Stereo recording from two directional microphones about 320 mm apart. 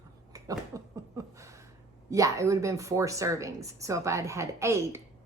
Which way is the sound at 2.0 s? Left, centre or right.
Centre.